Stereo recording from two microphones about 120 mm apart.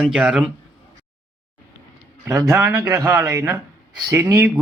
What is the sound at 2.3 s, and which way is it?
A man's voice, 20° right (ahead or behind).